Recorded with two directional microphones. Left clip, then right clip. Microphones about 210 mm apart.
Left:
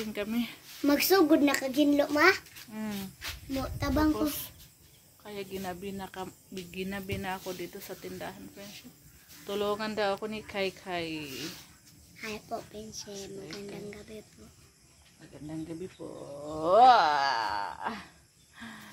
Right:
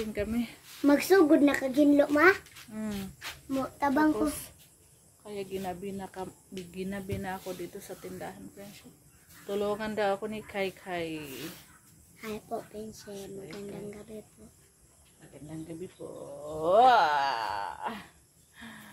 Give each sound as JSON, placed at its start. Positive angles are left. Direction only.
{"t": 0.1, "sound": "speech", "side_deg": 0}
{"t": 0.8, "sound": "a child's voice", "side_deg": -15}
{"t": 2.7, "sound": "speech", "side_deg": 0}
{"t": 3.8, "sound": "speech", "side_deg": -25}
{"t": 5.2, "sound": "speech", "side_deg": 0}
{"t": 12.2, "sound": "a child's voice", "side_deg": -10}
{"t": 16.0, "sound": "speech", "side_deg": 35}
{"t": 18.6, "sound": "a sound", "side_deg": 30}